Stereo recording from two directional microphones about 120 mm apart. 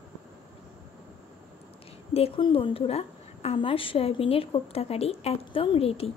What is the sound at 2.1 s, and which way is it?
A woman's voice, 50° left (ahead or behind).